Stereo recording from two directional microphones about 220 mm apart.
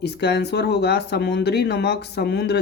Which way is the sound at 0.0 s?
50° left (ahead or behind).